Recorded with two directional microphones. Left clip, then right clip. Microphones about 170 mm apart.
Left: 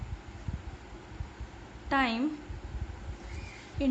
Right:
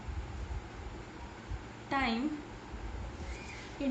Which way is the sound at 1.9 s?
40° left (ahead or behind).